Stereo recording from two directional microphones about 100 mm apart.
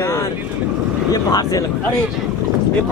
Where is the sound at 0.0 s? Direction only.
30° left (ahead or behind).